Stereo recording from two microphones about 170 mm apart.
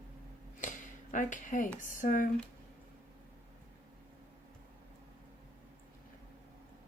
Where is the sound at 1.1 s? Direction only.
50° left (ahead or behind).